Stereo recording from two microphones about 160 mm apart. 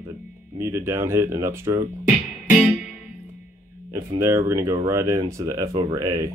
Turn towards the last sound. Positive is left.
turn(degrees=-20)  # may be behind; listen again after turning